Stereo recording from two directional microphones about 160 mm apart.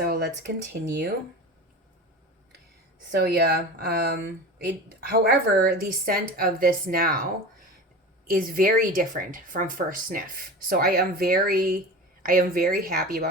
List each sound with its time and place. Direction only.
0.0 s speech: 85° right
3.2 s speech: 85° right; by 7.3 s 65° right (ahead or behind)
8.3 s speech: 65° right (ahead or behind)